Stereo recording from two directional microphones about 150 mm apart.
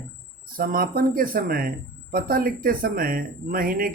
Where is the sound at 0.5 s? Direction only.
75° right (ahead or behind).